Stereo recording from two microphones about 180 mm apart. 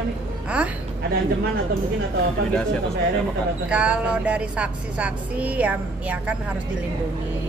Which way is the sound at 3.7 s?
5° right (ahead or behind).